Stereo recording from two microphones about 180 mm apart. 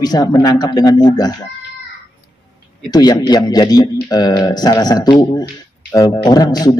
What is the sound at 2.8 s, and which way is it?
Speech, 20° left (ahead or behind).